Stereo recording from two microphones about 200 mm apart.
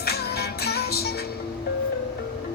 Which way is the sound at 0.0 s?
50° left (ahead or behind).